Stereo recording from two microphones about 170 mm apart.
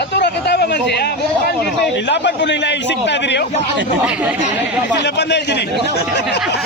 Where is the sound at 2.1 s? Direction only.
90° left.